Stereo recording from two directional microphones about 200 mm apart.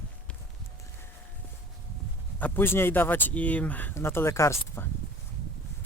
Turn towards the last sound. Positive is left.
turn(degrees=15)  # may be behind; listen again after turning